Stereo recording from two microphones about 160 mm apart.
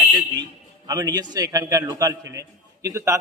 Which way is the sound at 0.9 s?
25° right (ahead or behind).